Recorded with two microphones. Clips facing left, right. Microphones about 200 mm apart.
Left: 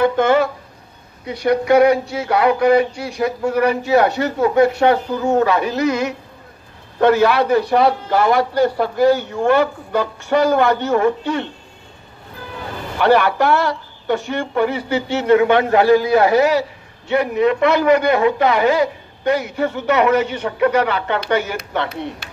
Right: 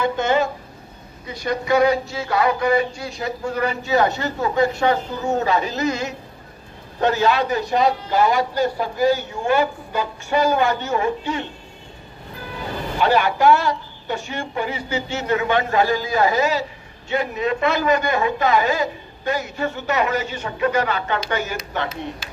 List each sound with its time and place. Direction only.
0.0 s a sound: 60° left (ahead or behind)
1.2 s a man's voice: 65° left (ahead or behind)
13.0 s a man's voice: 60° left (ahead or behind)